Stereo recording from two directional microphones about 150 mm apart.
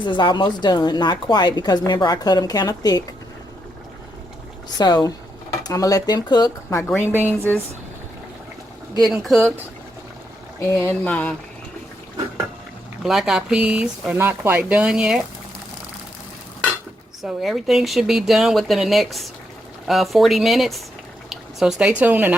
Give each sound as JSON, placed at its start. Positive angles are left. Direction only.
{"t": 0.0, "sound": "speech", "side_deg": 30}
{"t": 4.8, "sound": "speech", "side_deg": 25}
{"t": 7.0, "sound": "speech", "side_deg": -10}
{"t": 9.0, "sound": "speech", "side_deg": 0}
{"t": 10.6, "sound": "a sound", "side_deg": 15}
{"t": 13.0, "sound": "speech", "side_deg": -5}
{"t": 17.2, "sound": "speech", "side_deg": 0}